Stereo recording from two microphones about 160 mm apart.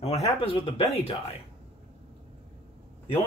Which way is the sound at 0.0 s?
40° left (ahead or behind).